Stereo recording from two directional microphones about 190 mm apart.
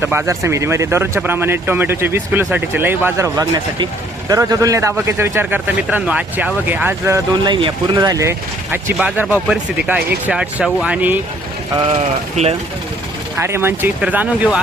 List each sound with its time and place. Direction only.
0.0 s speech: 15° right (ahead or behind)
11.9 s speech: 35° right (ahead or behind)
13.3 s speech: 10° right (ahead or behind)